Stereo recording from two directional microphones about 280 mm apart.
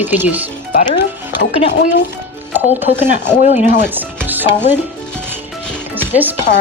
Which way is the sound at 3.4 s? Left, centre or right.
Left.